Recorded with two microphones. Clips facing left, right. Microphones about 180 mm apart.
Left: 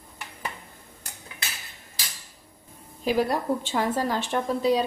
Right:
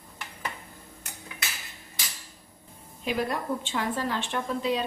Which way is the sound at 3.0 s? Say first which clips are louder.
Left 5 dB; 35° left (ahead or behind).